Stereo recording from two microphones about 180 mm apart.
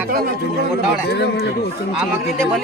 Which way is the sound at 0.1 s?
55° right (ahead or behind).